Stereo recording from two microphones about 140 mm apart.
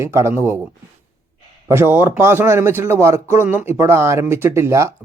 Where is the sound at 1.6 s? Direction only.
15° right (ahead or behind).